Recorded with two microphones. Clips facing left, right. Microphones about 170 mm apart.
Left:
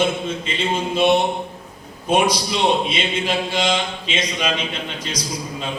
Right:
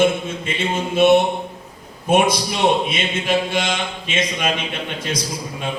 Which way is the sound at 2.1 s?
50° right (ahead or behind).